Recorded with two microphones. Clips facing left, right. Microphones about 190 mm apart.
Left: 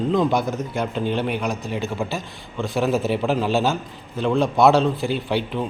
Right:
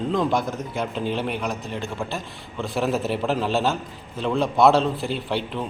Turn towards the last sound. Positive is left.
turn(degrees=0)  # may be behind; listen again after turning